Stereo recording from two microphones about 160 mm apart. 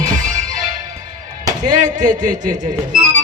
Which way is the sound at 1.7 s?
50° right (ahead or behind).